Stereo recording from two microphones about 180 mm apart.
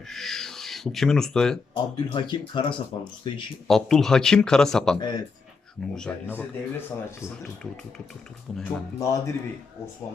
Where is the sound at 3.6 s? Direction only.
Centre (ahead or behind).